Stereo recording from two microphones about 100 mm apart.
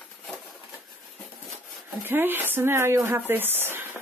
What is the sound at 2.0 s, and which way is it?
Speech, 20° right (ahead or behind).